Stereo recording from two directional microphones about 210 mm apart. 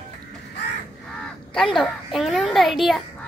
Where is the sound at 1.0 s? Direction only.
5° left (ahead or behind).